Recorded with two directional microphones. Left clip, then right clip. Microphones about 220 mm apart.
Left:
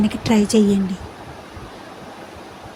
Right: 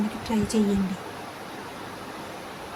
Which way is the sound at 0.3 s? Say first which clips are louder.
Left 10 dB; 25° left (ahead or behind).